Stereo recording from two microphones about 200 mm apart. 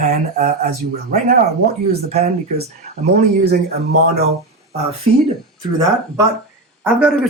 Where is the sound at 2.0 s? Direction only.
30° right (ahead or behind).